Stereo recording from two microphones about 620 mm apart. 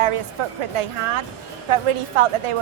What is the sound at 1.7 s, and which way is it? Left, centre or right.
Speech, right.